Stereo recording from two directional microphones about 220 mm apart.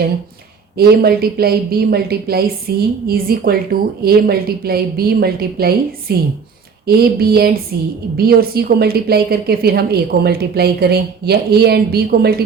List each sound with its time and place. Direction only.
0.8 s a woman's voice: 45° right (ahead or behind)